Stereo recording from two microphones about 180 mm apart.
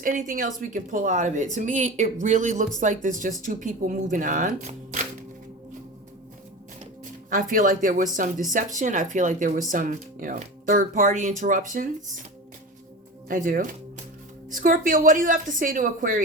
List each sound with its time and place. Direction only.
0.0 s speech: 45° right (ahead or behind)
7.3 s speech: 50° right (ahead or behind)
13.2 s speech: 50° right (ahead or behind)